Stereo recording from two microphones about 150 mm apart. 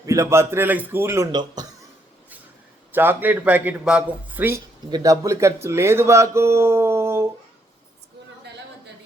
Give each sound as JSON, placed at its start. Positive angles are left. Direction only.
{"t": 0.0, "sound": "a man's voice", "side_deg": -20}
{"t": 2.9, "sound": "a man's voice", "side_deg": -15}
{"t": 4.9, "sound": "a man's voice", "side_deg": -25}